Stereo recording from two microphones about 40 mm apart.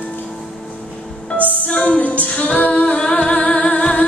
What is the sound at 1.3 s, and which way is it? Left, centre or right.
Music, left.